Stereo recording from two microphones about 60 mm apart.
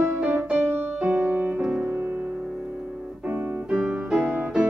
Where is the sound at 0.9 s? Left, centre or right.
Centre.